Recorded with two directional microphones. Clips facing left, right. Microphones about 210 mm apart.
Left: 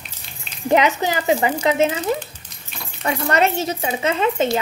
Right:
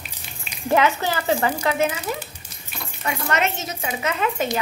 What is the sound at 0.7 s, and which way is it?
A woman's voice, 15° left (ahead or behind).